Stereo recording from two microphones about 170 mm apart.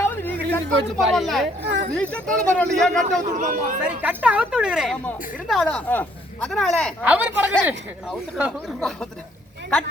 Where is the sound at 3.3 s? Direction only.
50° right (ahead or behind).